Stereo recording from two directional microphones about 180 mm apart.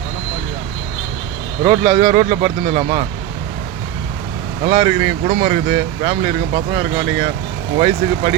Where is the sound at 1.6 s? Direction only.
25° right (ahead or behind).